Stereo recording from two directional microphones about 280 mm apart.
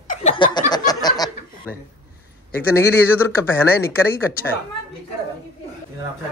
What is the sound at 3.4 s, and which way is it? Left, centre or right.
Speech, centre.